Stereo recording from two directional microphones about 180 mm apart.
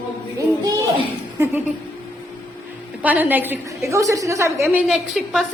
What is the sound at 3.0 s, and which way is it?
A woman's voice, 10° right (ahead or behind).